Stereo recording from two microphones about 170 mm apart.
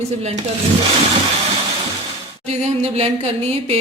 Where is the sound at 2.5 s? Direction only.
40° right (ahead or behind).